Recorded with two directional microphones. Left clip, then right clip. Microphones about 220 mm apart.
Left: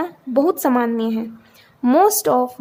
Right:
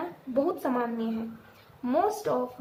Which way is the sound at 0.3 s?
50° left (ahead or behind).